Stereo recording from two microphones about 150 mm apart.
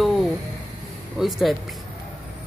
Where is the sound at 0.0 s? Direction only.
Centre (ahead or behind).